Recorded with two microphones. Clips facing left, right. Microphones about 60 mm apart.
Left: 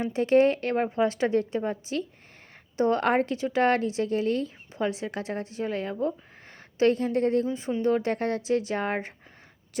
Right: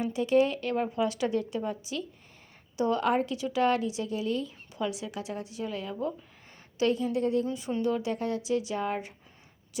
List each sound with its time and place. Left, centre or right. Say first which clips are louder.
0.0 s a woman's voice: left 4 dB; left